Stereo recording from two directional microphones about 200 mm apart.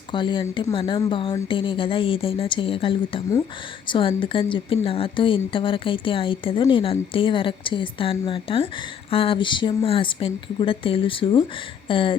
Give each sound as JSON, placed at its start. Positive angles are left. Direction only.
{"t": 0.1, "sound": "speech", "side_deg": 25}